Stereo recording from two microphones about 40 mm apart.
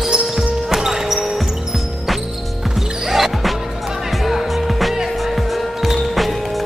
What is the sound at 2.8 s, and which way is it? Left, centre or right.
Music, centre.